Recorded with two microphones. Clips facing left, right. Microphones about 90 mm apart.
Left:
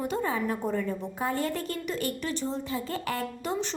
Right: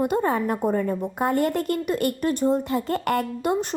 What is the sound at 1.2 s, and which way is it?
A woman's voice, 60° right (ahead or behind).